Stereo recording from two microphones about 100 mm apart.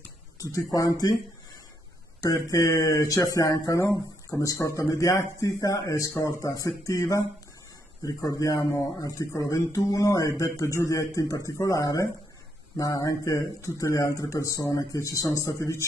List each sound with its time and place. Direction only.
0.4 s speech: 35° left (ahead or behind)
2.2 s speech: 35° left (ahead or behind)